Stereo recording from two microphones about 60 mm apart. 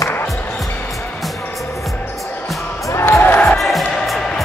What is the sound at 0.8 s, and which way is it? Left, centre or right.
Music, centre.